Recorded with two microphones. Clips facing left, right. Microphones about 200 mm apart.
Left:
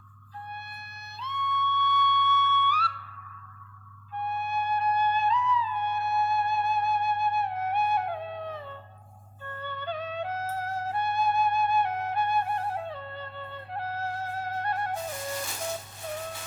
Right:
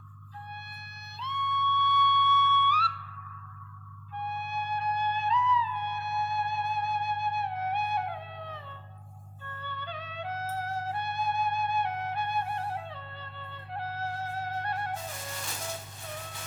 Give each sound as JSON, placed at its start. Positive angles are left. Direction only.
{"t": 1.2, "sound": "music", "side_deg": 45}
{"t": 4.2, "sound": "music", "side_deg": 50}